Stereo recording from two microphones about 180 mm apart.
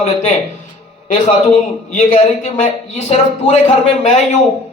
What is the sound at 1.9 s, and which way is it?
Speech, 45° left (ahead or behind).